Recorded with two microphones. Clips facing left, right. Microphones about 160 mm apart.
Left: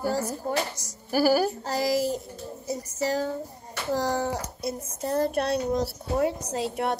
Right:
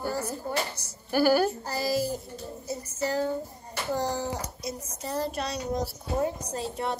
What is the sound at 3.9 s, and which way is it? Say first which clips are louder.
A child's voice: left 3 dB; 80° left.